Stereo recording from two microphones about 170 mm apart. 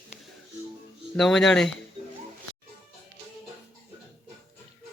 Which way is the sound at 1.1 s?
Centre (ahead or behind).